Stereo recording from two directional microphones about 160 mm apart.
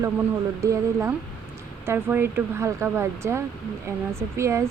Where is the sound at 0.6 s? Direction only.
15° right (ahead or behind).